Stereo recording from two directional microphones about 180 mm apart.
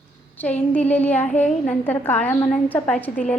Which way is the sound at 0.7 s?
10° left (ahead or behind).